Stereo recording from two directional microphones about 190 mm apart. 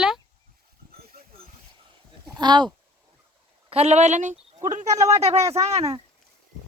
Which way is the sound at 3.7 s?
35° right (ahead or behind).